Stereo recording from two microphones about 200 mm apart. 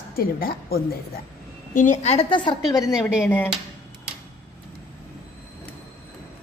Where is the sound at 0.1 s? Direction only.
50° left (ahead or behind); by 2.5 s 25° left (ahead or behind).